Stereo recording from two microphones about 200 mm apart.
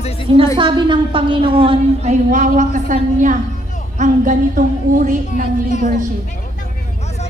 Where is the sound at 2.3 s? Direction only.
40° right (ahead or behind).